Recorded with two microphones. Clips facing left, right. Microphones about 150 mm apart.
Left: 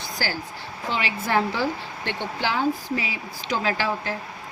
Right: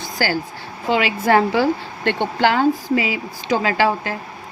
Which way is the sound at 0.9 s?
90° right.